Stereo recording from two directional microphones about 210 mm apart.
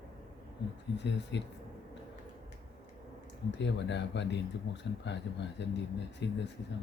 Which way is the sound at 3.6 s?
55° left (ahead or behind).